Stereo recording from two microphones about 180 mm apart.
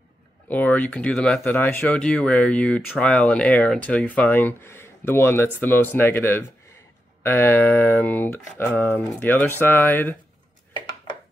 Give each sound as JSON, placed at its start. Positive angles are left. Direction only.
{"t": 0.5, "sound": "speech", "side_deg": 10}